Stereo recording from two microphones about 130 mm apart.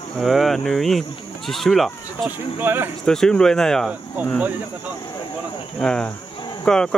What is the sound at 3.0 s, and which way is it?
Speech, 5° left (ahead or behind).